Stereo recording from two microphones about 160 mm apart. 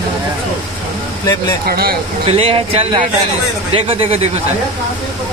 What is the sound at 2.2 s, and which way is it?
Speech, 35° right (ahead or behind).